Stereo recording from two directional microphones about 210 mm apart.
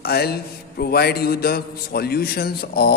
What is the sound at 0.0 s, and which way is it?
Mantra, 50° left (ahead or behind).